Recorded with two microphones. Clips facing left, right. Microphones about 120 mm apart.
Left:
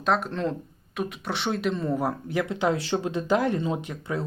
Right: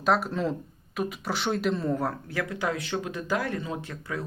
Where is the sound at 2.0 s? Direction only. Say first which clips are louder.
Left 3 dB; 15° left (ahead or behind).